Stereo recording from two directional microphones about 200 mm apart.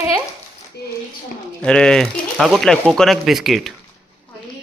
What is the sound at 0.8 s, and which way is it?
Speech, 55° left (ahead or behind).